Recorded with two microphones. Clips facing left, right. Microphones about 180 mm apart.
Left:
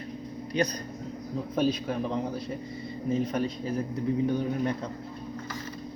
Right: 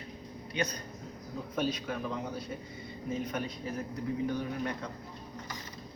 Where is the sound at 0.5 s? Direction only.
35° left (ahead or behind).